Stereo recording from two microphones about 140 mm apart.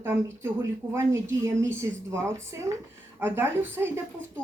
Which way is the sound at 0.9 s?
20° right (ahead or behind).